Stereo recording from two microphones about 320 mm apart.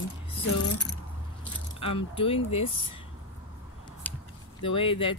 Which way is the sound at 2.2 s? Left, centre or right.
Centre.